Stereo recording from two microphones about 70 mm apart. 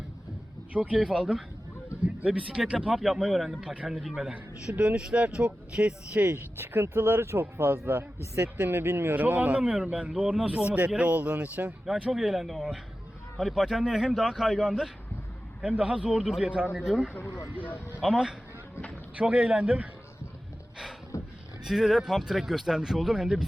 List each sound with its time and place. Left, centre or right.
0.7 s speech: centre
6.6 s speech: right
12.1 s speech: centre
16.7 s speech: centre
19.1 s a man's voice: centre
21.1 s a sound: left
21.6 s speech: centre